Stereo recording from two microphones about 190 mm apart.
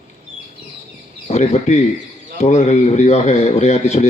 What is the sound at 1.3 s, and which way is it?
A man's voice, 35° left (ahead or behind).